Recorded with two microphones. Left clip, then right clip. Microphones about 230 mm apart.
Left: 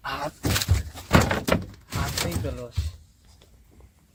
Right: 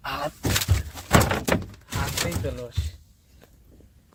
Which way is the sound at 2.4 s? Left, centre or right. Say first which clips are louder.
Right 2 dB; centre.